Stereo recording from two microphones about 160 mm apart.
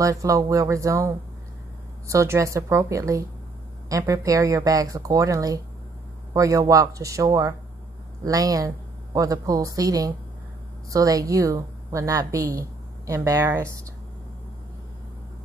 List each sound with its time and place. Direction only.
0.0 s a man's voice: 20° right (ahead or behind)